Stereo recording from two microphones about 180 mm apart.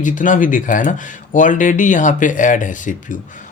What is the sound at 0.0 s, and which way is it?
Speech, 45° left (ahead or behind).